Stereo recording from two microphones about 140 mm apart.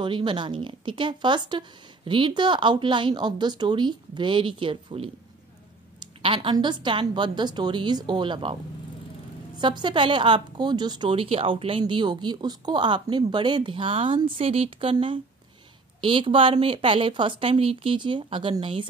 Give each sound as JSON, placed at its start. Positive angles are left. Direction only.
{"t": 0.0, "sound": "a woman's voice", "side_deg": -35}
{"t": 6.2, "sound": "a woman's voice", "side_deg": -40}
{"t": 9.6, "sound": "a woman's voice", "side_deg": -35}